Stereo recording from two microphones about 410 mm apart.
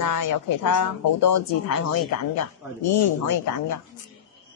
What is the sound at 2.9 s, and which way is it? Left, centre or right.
Speech, left.